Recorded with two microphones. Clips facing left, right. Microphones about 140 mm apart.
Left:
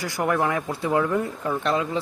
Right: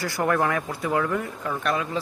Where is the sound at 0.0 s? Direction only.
15° left (ahead or behind).